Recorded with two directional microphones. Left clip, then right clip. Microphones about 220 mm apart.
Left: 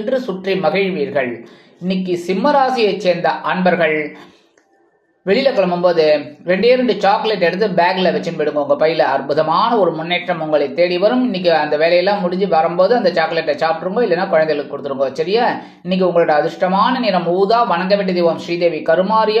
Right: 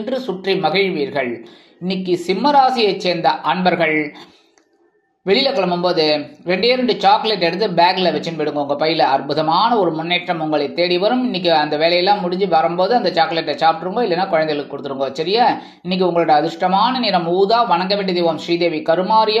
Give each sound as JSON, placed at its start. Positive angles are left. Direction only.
{"t": 0.1, "sound": "speech", "side_deg": -20}
{"t": 5.5, "sound": "speech", "side_deg": -20}